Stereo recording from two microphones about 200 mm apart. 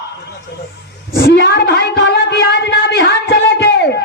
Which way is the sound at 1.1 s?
55° left (ahead or behind).